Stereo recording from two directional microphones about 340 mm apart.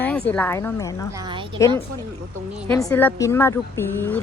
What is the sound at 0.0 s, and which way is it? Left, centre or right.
Speech, centre.